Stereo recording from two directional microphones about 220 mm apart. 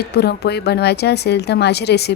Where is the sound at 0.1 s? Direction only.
45° left (ahead or behind).